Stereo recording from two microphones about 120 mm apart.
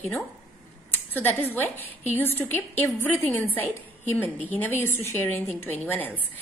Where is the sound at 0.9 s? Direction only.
15° left (ahead or behind).